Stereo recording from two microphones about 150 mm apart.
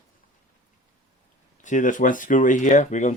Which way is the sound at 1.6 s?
60° left (ahead or behind).